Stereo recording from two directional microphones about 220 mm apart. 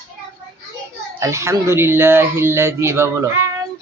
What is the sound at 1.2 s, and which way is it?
A man's voice, 10° right (ahead or behind).